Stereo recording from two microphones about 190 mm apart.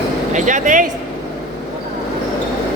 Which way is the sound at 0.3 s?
40° right (ahead or behind).